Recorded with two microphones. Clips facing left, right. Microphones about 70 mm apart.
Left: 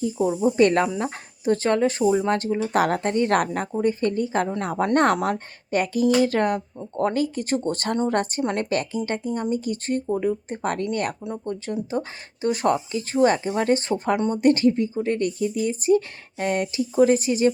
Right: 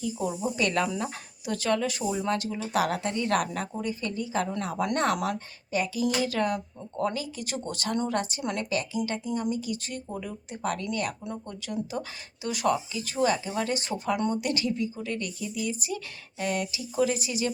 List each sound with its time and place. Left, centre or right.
0.0 s speech: left
5.7 s speech: left
8.7 s speech: left